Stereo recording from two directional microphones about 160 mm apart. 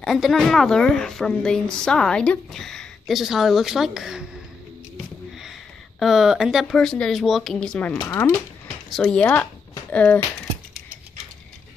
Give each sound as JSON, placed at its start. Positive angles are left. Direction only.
{"t": 0.0, "sound": "a woman's voice", "side_deg": 0}
{"t": 5.4, "sound": "speech", "side_deg": 0}
{"t": 8.0, "sound": "speech", "side_deg": 20}
{"t": 8.9, "sound": "speech", "side_deg": 5}